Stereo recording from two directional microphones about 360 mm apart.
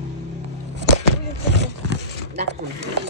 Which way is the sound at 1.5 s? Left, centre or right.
Right.